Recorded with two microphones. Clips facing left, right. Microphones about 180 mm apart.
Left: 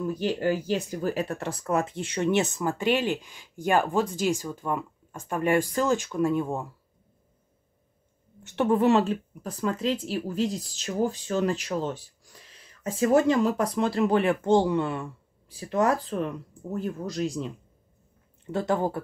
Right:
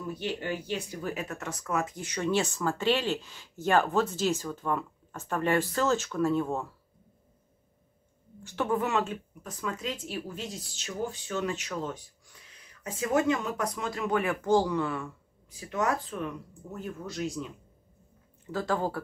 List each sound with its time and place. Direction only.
0.1 s speech: 40° left (ahead or behind); by 6.7 s 15° left (ahead or behind)
8.5 s speech: 25° left (ahead or behind)
18.5 s speech: 25° left (ahead or behind)